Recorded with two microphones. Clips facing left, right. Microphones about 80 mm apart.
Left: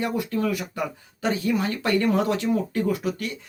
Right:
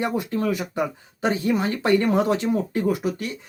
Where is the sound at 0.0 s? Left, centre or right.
Right.